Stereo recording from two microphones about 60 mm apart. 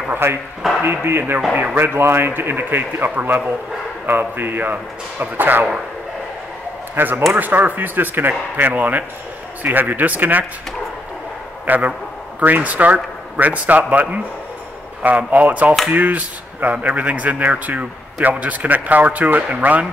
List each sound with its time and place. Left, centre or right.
0.1 s speech: right
0.6 s speech: centre
0.8 s a man's voice: right
1.5 s speech: right
1.8 s a man's voice: right
7.0 s a man's voice: right
11.6 s a man's voice: right